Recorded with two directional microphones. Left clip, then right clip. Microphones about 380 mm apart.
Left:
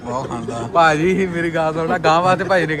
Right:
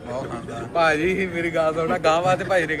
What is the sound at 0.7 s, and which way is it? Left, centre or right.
A man's voice, left.